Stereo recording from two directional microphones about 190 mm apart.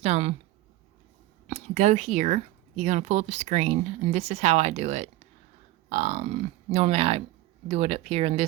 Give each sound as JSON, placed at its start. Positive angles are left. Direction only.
{"t": 0.0, "sound": "speech", "side_deg": -35}
{"t": 1.5, "sound": "speech", "side_deg": -40}